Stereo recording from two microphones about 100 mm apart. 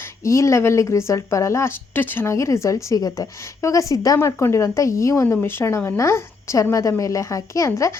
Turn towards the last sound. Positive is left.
turn(degrees=30)  # may be behind; listen again after turning